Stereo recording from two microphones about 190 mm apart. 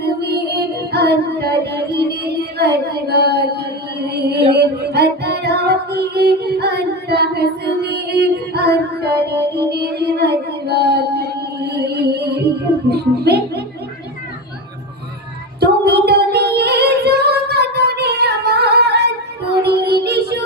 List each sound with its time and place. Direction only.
0.2 s music: 60° right (ahead or behind)
15.6 s singing: 60° right (ahead or behind)
19.6 s music: 60° right (ahead or behind)